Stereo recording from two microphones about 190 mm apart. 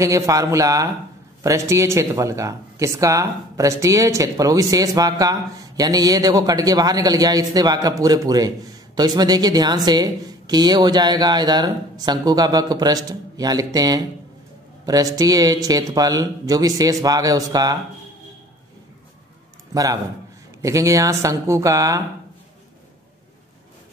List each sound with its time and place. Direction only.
0.0 s speech: 15° right (ahead or behind)
19.7 s a man's voice: 20° right (ahead or behind)